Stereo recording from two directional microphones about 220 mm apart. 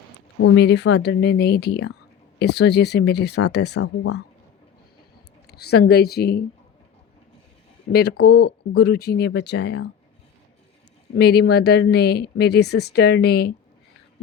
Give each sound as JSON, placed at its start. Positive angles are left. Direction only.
{"t": 0.4, "sound": "a woman's voice", "side_deg": 55}
{"t": 3.6, "sound": "speech", "side_deg": 90}
{"t": 5.5, "sound": "a woman's voice", "side_deg": 45}
{"t": 8.2, "sound": "a woman's voice", "side_deg": 45}
{"t": 11.1, "sound": "a woman's voice", "side_deg": 45}